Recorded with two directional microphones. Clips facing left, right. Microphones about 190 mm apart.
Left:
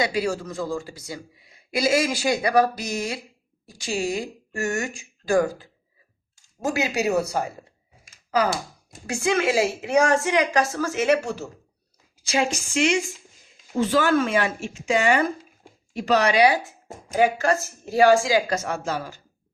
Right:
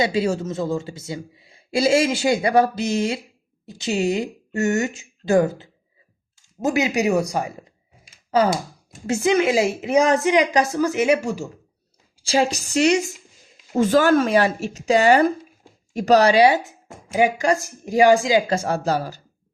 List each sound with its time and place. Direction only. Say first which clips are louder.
0.0 s a woman's voice: right 3 dB; 25° right (ahead or behind)
8.0 s sigh: right 4 dB; 30° right (ahead or behind)
9.0 s a woman's voice: right 4 dB; 20° right (ahead or behind)
12.1 s speech: right 4 dB; 30° right (ahead or behind)
17.2 s speech: right 2 dB; 15° right (ahead or behind); by 19.2 s 40° right (ahead or behind)